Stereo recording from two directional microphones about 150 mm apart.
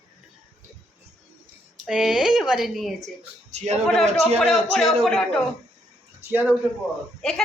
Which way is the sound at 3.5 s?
45° right (ahead or behind).